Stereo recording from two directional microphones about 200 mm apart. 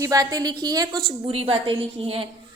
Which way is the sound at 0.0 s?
15° right (ahead or behind).